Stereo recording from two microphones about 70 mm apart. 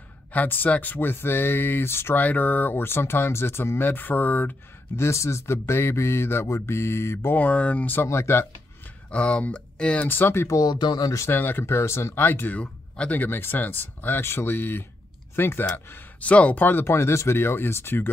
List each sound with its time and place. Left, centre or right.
0.3 s speech: left
4.9 s speech: left
7.3 s speech: left
8.1 s speech: left
9.1 s speech: centre
10.0 s speech: left
10.5 s speech: left
11.1 s speech: left
11.3 s speech: left
11.6 s speech: left
12.3 s speech: left
16.2 s speech: left